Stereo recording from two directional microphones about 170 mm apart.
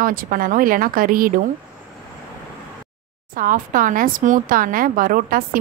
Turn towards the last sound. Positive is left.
turn(degrees=-55)  # may be behind; listen again after turning